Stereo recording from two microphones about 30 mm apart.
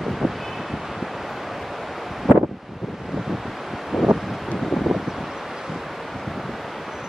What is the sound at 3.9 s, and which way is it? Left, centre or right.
Wind, centre.